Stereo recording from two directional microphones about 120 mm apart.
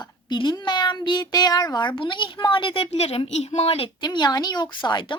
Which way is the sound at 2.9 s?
55° left (ahead or behind).